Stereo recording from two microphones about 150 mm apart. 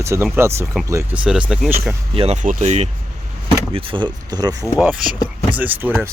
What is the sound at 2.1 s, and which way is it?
Speech, 45° right (ahead or behind).